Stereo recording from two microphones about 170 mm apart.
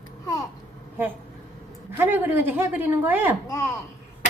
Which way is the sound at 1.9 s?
10° right (ahead or behind).